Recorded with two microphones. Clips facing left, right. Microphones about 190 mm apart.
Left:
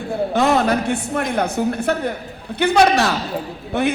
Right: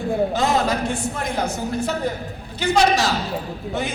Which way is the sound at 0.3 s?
60° left (ahead or behind).